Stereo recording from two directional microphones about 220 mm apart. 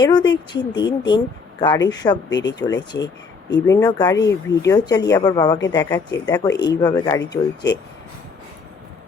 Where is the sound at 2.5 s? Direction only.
20° left (ahead or behind).